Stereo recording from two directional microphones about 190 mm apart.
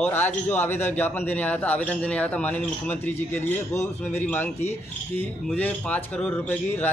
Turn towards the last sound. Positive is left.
turn(degrees=10)  # may be behind; listen again after turning